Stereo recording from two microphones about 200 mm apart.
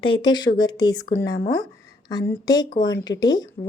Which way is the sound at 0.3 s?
20° left (ahead or behind).